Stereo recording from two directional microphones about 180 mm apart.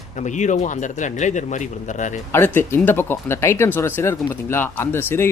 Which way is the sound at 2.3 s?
10° left (ahead or behind).